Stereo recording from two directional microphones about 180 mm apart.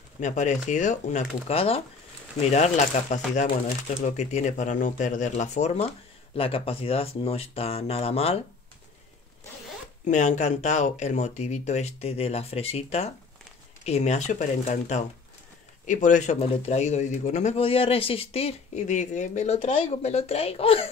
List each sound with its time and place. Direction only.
0.2 s a man's voice: 40° left (ahead or behind)
10.0 s a man's voice: 40° left (ahead or behind)